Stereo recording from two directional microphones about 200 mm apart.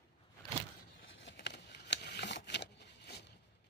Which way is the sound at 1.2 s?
60° left (ahead or behind).